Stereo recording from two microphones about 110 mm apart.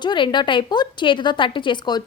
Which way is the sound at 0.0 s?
45° left (ahead or behind).